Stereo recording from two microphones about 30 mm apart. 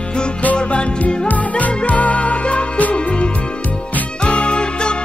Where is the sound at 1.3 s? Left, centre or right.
Left.